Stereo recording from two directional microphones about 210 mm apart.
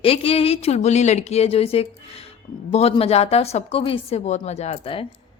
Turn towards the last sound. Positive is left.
turn(degrees=25)  # may be behind; listen again after turning